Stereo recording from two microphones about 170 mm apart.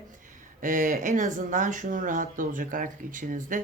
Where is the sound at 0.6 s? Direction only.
50° right (ahead or behind).